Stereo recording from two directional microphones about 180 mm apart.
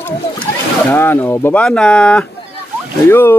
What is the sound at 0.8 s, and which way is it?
Speech, 10° left (ahead or behind).